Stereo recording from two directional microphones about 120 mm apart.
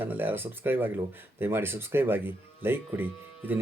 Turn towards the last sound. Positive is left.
turn(degrees=-15)  # may be behind; listen again after turning